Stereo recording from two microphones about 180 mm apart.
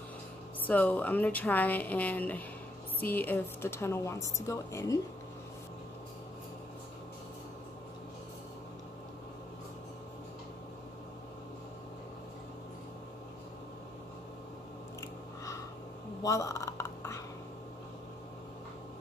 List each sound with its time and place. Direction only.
0.7 s a woman's voice: 10° left (ahead or behind)
15.0 s chewing: 20° left (ahead or behind)
16.2 s a sound: 20° left (ahead or behind)